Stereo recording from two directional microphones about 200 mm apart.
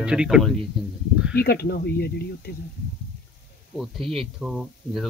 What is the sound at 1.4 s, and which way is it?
Speech, 50° left (ahead or behind).